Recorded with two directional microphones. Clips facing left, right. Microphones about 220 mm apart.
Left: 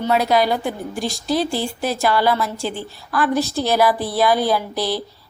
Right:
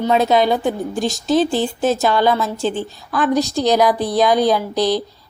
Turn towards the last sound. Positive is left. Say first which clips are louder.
# right 4 dB
turn(degrees=-15)  # may be behind; listen again after turning